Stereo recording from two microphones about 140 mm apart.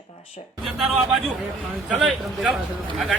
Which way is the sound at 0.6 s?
Centre (ahead or behind).